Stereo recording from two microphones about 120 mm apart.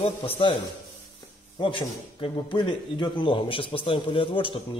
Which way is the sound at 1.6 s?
45° left (ahead or behind).